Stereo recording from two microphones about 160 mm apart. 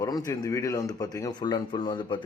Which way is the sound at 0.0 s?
25° left (ahead or behind).